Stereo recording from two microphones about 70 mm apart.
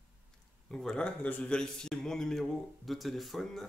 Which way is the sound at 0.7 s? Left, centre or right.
Centre.